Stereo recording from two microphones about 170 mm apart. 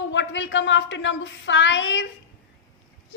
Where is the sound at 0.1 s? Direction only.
90° left.